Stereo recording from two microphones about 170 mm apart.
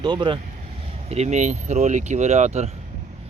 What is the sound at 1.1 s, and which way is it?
Speech, 40° right (ahead or behind).